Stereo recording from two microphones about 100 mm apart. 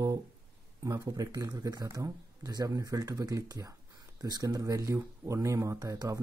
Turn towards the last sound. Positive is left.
turn(degrees=-30)  # may be behind; listen again after turning